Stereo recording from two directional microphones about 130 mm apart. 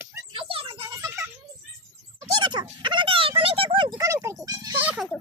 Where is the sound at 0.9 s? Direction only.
20° right (ahead or behind).